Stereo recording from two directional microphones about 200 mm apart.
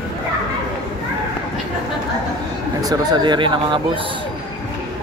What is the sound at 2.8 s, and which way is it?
Speech, 20° right (ahead or behind).